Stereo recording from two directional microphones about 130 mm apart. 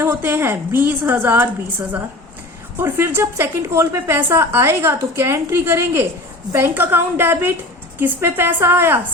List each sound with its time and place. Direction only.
0.0 s a woman's voice: 15° right (ahead or behind)
2.7 s a woman's voice: 15° right (ahead or behind)